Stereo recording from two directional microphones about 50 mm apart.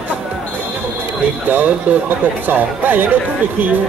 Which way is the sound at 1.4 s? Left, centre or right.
Right.